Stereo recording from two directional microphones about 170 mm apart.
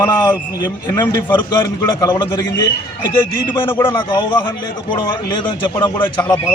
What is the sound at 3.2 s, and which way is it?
Speech, 15° left (ahead or behind).